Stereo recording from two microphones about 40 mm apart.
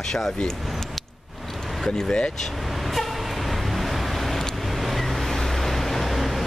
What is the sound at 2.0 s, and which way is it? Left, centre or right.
Speech, left.